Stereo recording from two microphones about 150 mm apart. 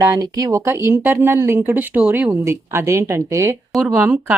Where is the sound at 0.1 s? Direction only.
20° right (ahead or behind).